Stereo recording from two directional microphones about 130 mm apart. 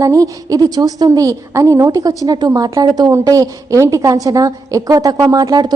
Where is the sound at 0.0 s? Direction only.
25° right (ahead or behind).